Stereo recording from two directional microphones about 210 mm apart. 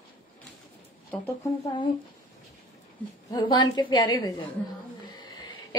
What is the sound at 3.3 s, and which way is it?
A woman's voice, 20° left (ahead or behind).